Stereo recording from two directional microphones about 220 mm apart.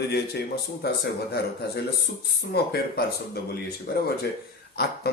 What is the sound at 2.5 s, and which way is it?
Speech, 45° left (ahead or behind).